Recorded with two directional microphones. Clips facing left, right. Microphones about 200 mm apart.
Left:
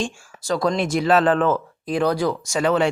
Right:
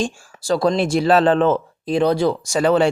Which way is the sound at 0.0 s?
30° right (ahead or behind).